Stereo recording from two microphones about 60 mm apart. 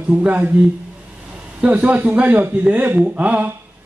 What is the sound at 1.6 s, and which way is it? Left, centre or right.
Speech, right.